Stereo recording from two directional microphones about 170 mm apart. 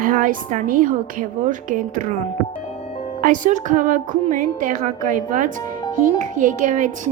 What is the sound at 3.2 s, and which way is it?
A woman's voice, 50° right (ahead or behind).